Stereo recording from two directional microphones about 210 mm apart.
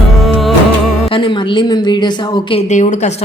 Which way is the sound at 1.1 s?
25° left (ahead or behind).